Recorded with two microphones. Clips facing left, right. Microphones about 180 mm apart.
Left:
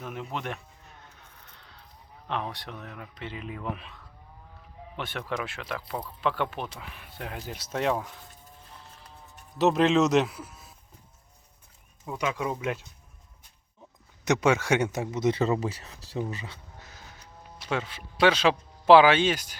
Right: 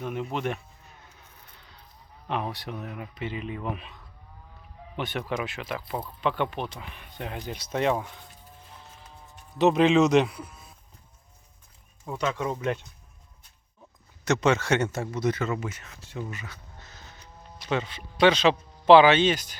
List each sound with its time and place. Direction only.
0.0 s speech: centre (ahead or behind)
2.2 s speech: 5° right (ahead or behind)
8.7 s music: 5° right (ahead or behind)
9.6 s speech: centre (ahead or behind)
12.1 s speech: 10° left (ahead or behind)
14.3 s speech: 10° left (ahead or behind)
15.4 s speech: 35° left (ahead or behind)
16.7 s music: 10° left (ahead or behind)
17.7 s a man's voice: 5° left (ahead or behind)